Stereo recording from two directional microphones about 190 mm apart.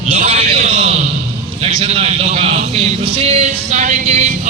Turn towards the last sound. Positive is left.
turn(degrees=-35)  # may be behind; listen again after turning